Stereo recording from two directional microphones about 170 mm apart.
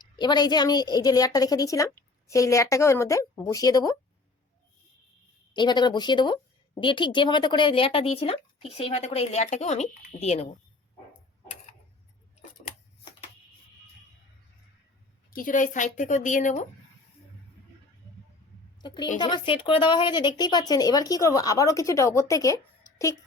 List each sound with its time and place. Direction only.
0.0 s a woman's voice: 25° left (ahead or behind)
5.5 s a woman's voice: 25° left (ahead or behind)
15.3 s a woman's voice: 55° left (ahead or behind)
18.8 s a woman's voice: 25° left (ahead or behind)